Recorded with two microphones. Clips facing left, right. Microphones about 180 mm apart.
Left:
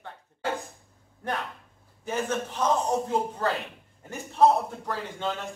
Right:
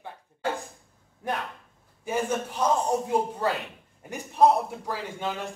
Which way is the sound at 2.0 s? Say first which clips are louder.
Right 1 dB; 10° right (ahead or behind).